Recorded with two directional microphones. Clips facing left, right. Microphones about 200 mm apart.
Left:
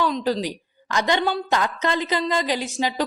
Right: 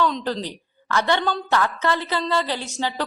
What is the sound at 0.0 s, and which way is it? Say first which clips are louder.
A woman's voice: left 1 dB; 10° left (ahead or behind).